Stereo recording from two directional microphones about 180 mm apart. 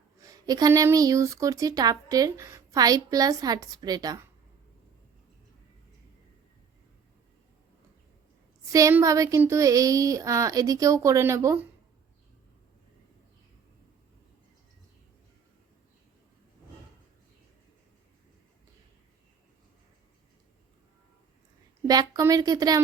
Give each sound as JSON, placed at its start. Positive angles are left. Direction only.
{"t": 0.2, "sound": "speech", "side_deg": -20}
{"t": 8.7, "sound": "speech", "side_deg": -15}
{"t": 21.8, "sound": "speech", "side_deg": -20}